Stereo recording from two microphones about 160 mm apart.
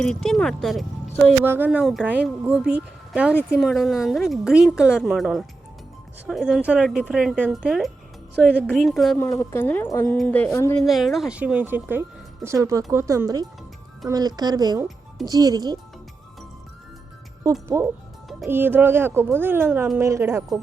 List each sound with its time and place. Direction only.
0.0 s speech: 5° left (ahead or behind)
1.5 s speech: 10° right (ahead or behind)
9.1 s speech: 20° left (ahead or behind)
10.8 s speech: centre (ahead or behind); by 15.8 s 25° right (ahead or behind)
17.4 s speech: 20° right (ahead or behind)